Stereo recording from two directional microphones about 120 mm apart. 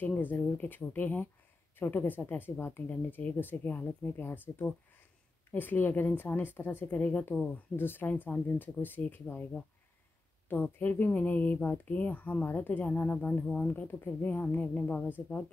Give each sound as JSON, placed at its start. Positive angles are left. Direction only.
{"t": 0.0, "sound": "speech", "side_deg": 15}